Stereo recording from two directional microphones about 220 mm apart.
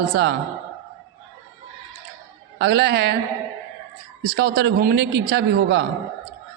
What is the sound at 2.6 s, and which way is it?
Speech, 50° right (ahead or behind).